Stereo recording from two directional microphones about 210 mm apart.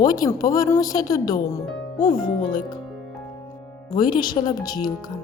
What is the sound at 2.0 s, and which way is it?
Speech, 40° left (ahead or behind).